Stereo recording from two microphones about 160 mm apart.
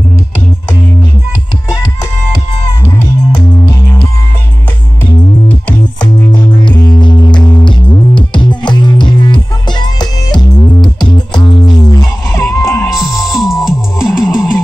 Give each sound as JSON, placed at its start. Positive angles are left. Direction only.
{"t": 3.3, "sound": "music", "side_deg": 25}
{"t": 5.5, "sound": "music", "side_deg": 10}
{"t": 6.3, "sound": "music", "side_deg": 30}
{"t": 11.8, "sound": "chicken", "side_deg": 25}
{"t": 12.8, "sound": "music", "side_deg": 0}